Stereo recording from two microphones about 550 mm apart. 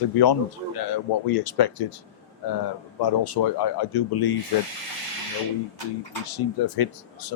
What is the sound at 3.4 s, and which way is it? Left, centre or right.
Speech, left.